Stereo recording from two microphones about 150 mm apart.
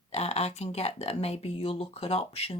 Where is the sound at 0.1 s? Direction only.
45° left (ahead or behind).